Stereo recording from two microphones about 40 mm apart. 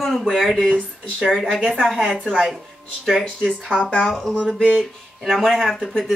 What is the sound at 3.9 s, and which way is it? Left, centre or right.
Speech, centre.